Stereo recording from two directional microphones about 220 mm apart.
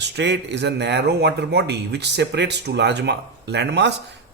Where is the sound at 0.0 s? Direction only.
50° right (ahead or behind).